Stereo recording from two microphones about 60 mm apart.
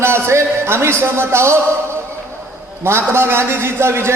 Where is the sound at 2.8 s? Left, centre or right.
Right.